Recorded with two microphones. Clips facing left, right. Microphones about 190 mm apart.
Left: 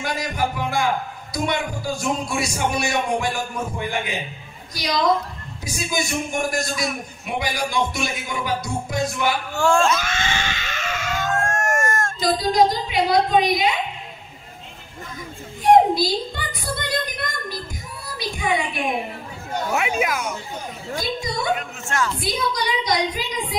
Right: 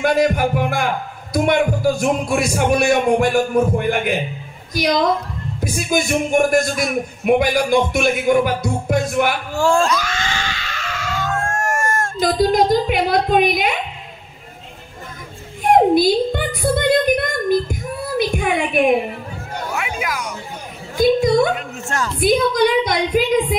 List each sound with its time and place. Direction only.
0.0 s a man's voice: 55° right (ahead or behind)
9.6 s speech: 35° right (ahead or behind)
9.8 s screaming: 25° left (ahead or behind)
11.4 s a sound: 30° right (ahead or behind)
12.2 s a man's voice: 55° right (ahead or behind)
15.7 s child singing: 55° right (ahead or behind)
18.2 s a sound: 60° right (ahead or behind)
19.7 s speech: 25° left (ahead or behind)
20.9 s a sound: 55° right (ahead or behind)
21.5 s speech: 40° right (ahead or behind)
22.2 s a man's voice: 55° right (ahead or behind)